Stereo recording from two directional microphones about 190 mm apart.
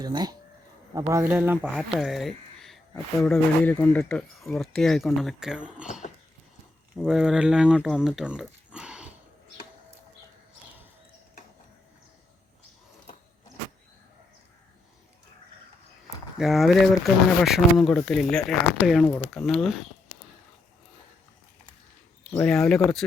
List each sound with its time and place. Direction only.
0.0 s speech: 20° right (ahead or behind)
1.1 s speech: 10° right (ahead or behind)
6.9 s speech: centre (ahead or behind)
16.0 s speech: centre (ahead or behind)
22.2 s speech: 5° left (ahead or behind)